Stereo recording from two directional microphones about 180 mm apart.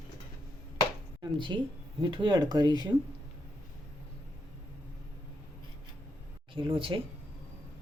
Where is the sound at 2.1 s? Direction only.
25° right (ahead or behind).